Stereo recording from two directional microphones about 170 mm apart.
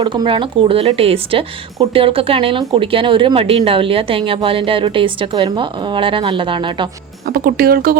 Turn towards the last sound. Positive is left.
turn(degrees=-60)  # may be behind; listen again after turning